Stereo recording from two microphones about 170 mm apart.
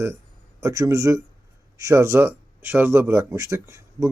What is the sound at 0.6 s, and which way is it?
Speech, 20° right (ahead or behind).